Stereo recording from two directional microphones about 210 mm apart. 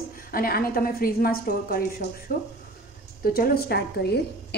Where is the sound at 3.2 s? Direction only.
45° left (ahead or behind).